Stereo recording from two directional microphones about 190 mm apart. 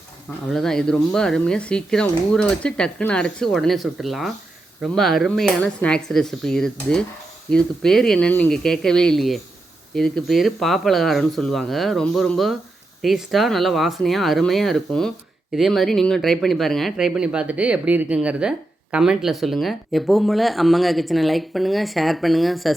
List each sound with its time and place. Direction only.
0.5 s speech: 5° left (ahead or behind)